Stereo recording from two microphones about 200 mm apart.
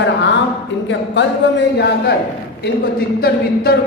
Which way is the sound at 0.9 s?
60° left (ahead or behind).